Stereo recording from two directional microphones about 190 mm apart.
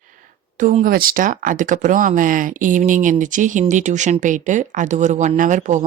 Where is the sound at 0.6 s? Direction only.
40° right (ahead or behind).